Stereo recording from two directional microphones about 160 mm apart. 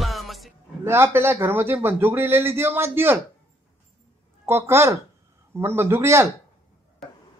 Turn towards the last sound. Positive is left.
turn(degrees=-15)  # may be behind; listen again after turning